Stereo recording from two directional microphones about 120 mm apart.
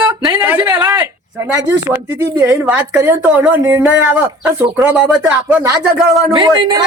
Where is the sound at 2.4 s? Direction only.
15° right (ahead or behind).